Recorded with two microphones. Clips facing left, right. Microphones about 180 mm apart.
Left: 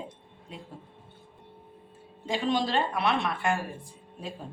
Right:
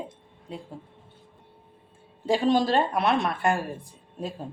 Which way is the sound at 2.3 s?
40° right (ahead or behind).